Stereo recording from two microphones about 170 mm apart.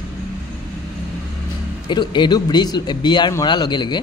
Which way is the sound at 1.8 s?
25° left (ahead or behind).